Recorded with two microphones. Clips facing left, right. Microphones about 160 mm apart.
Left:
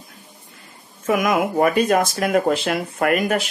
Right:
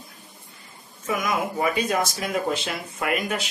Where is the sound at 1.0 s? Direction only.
55° left (ahead or behind).